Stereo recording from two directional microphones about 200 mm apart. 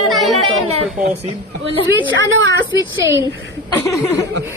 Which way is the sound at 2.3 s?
75° right (ahead or behind).